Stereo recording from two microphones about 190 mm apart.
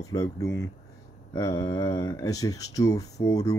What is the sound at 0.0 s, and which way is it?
Speech, 15° left (ahead or behind).